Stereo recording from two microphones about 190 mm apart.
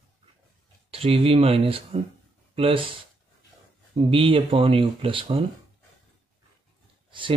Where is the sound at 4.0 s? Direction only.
30° right (ahead or behind).